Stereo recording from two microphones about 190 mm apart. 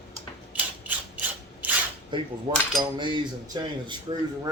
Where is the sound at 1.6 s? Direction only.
10° right (ahead or behind).